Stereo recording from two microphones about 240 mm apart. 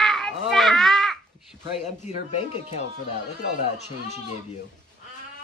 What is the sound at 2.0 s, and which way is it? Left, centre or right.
Speech, left.